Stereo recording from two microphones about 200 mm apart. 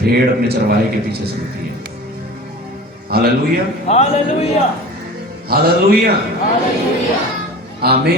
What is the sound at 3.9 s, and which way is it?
Speech, 30° left (ahead or behind).